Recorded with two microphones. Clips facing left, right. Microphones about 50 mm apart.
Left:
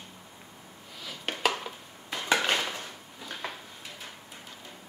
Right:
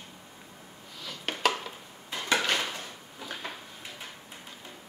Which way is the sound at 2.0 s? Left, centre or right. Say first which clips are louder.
Left 3 dB; left.